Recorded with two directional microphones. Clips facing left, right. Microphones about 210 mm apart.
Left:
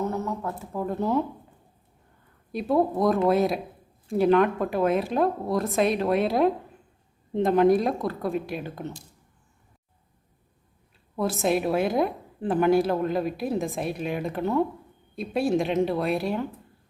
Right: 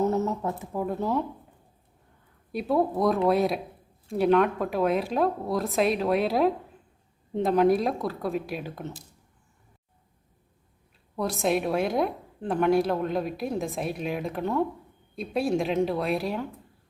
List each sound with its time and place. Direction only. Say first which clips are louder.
0.1 s speech: right 3 dB; 20° right (ahead or behind)
0.7 s a woman's voice: left 3 dB; 5° right (ahead or behind)
2.5 s a woman's voice: left 2 dB; centre (ahead or behind)
11.2 s a woman's voice: left 1 dB; centre (ahead or behind)